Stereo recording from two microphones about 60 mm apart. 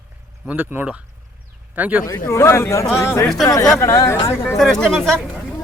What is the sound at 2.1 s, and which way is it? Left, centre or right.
Speech, left.